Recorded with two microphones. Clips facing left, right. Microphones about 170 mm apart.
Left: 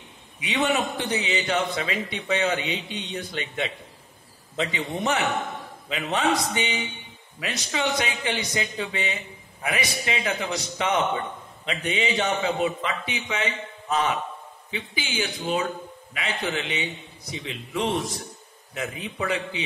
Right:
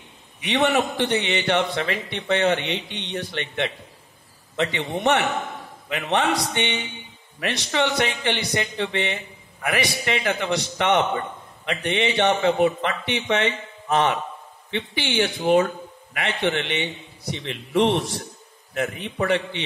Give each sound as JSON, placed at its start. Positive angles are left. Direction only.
{"t": 0.5, "sound": "a man's voice", "side_deg": -70}